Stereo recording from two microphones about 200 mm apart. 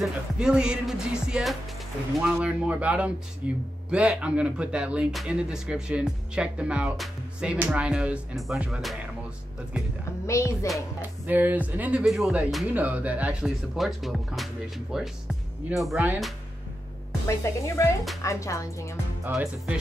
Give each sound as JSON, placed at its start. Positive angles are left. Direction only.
{"t": 0.0, "sound": "speech", "side_deg": -5}
{"t": 10.2, "sound": "a woman's voice", "side_deg": 15}
{"t": 10.7, "sound": "speech", "side_deg": -10}
{"t": 17.3, "sound": "a woman's voice", "side_deg": 15}
{"t": 19.2, "sound": "speech", "side_deg": -5}